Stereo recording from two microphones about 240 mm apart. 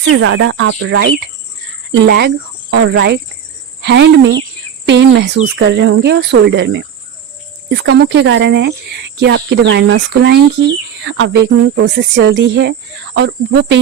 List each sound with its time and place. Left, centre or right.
0.0 s a woman's voice: right